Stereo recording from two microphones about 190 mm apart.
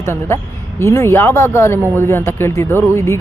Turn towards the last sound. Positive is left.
turn(degrees=15)  # may be behind; listen again after turning